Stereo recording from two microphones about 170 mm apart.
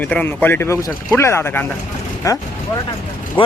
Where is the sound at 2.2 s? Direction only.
20° left (ahead or behind).